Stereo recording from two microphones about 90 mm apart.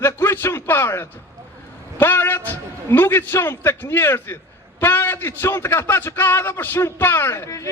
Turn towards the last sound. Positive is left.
turn(degrees=35)  # may be behind; listen again after turning